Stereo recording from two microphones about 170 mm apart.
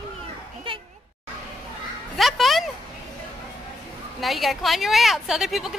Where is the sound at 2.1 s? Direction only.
Centre (ahead or behind).